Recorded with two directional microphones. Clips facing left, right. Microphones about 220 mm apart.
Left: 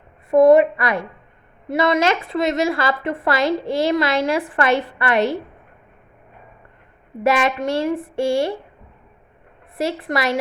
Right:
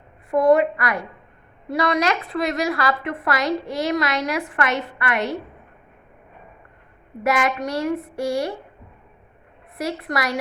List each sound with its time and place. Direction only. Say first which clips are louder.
0.3 s a woman's voice: left 5 dB; 25° left (ahead or behind)
7.3 s a woman's voice: left 3 dB; 25° left (ahead or behind)
9.7 s a woman's voice: left 3 dB; 25° left (ahead or behind)